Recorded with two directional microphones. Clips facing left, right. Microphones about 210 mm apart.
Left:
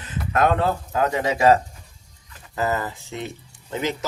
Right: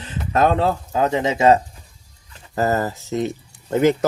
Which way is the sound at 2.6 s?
40° right (ahead or behind).